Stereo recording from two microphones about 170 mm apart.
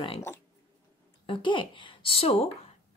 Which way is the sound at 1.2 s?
30° left (ahead or behind).